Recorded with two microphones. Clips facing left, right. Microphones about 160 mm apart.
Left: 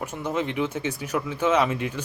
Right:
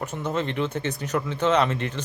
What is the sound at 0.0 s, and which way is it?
Speech, 10° left (ahead or behind).